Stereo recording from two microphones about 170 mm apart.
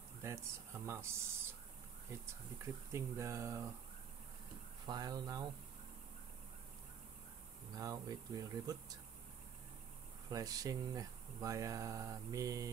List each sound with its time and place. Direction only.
0.2 s speech: 15° right (ahead or behind)
2.6 s speech: 15° right (ahead or behind)
4.8 s speech: 25° right (ahead or behind)
7.7 s speech: 20° right (ahead or behind)
10.3 s speech: 20° right (ahead or behind)